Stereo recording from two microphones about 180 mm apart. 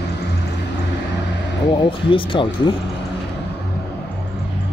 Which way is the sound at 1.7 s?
30° left (ahead or behind).